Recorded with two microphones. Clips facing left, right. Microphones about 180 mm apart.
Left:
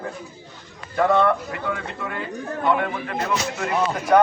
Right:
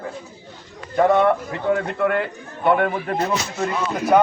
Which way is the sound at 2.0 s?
65° right (ahead or behind).